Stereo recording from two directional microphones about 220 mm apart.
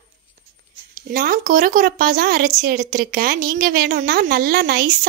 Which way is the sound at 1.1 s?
40° right (ahead or behind).